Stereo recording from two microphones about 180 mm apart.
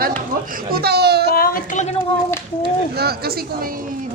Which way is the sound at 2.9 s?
60° right (ahead or behind).